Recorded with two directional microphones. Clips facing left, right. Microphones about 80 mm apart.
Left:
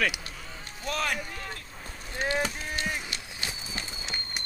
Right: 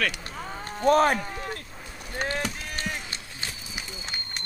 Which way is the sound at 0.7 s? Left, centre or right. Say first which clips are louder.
Right 11 dB; right.